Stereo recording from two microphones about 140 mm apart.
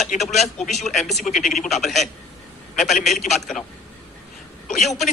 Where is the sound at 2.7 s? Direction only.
60° left (ahead or behind).